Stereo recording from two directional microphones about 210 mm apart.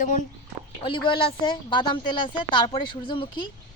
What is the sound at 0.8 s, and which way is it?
A woman's voice, 25° left (ahead or behind).